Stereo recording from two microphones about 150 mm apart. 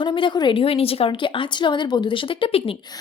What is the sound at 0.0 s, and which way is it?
A woman's voice, 35° left (ahead or behind).